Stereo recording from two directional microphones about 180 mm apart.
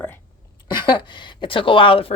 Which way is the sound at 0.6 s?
25° left (ahead or behind).